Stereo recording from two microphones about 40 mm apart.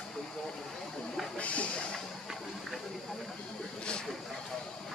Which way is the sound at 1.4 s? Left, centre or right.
Left.